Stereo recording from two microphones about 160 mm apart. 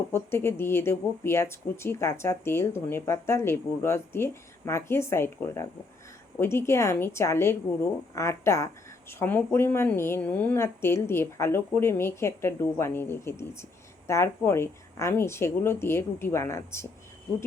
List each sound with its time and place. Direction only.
0.1 s speech: 15° left (ahead or behind)